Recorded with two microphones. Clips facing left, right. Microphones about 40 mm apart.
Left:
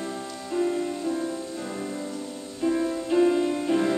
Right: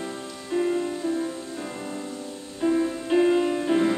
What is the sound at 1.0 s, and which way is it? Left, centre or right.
Music, centre.